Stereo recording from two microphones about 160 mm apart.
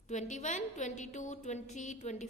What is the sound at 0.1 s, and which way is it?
A woman's voice, 50° left (ahead or behind).